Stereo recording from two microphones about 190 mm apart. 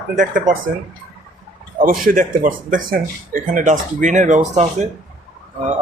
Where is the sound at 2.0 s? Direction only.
45° right (ahead or behind).